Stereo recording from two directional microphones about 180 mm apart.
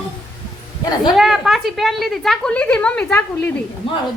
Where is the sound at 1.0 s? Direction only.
Centre (ahead or behind).